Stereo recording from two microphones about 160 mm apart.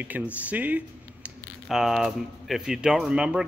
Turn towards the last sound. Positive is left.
turn(degrees=-5)  # may be behind; listen again after turning